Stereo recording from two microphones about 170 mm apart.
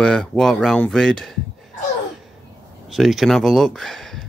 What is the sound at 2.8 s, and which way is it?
Speech, centre (ahead or behind).